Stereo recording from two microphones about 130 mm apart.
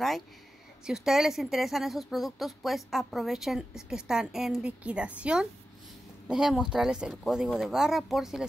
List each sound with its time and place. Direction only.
0.8 s speech: 5° right (ahead or behind)